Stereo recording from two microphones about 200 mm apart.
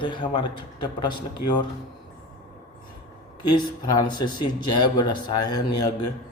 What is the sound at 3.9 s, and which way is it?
Speech, 20° left (ahead or behind).